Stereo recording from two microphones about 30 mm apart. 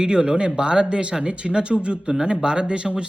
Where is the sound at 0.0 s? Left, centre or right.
Right.